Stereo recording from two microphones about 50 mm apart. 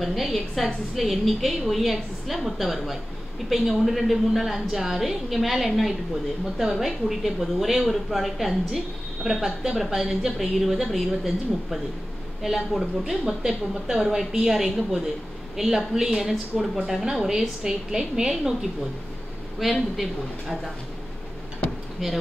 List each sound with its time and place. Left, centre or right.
0.0 s a woman's voice: centre
12.4 s a woman's voice: centre
19.6 s a woman's voice: centre
22.0 s a woman's voice: centre